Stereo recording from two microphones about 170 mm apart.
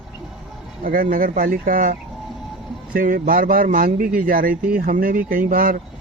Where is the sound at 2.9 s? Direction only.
55° right (ahead or behind).